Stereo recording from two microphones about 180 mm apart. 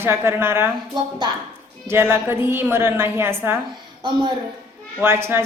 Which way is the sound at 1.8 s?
15° right (ahead or behind).